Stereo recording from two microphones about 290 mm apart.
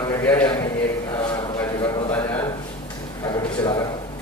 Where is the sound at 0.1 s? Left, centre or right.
Centre.